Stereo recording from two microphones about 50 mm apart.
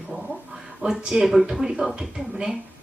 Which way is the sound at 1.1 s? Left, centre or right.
Centre.